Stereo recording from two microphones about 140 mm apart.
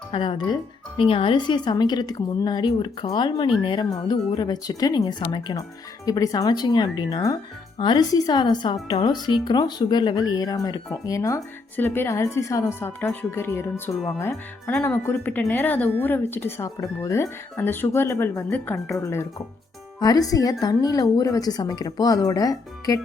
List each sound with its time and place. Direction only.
0.1 s a woman's voice: 35° left (ahead or behind)